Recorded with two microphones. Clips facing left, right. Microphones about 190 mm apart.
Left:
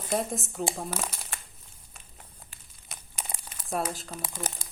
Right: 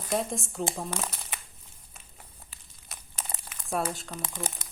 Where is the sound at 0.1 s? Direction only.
Centre (ahead or behind).